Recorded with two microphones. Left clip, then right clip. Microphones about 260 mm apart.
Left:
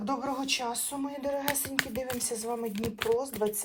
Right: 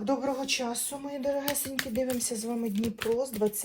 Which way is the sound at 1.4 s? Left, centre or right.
Left.